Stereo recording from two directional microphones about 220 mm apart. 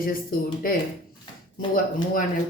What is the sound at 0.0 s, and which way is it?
Speech, 40° left (ahead or behind).